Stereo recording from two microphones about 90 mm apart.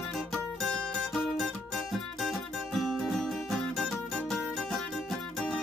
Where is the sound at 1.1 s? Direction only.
Centre (ahead or behind).